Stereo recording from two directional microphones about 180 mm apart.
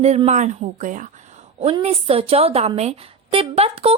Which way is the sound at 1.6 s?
35° right (ahead or behind).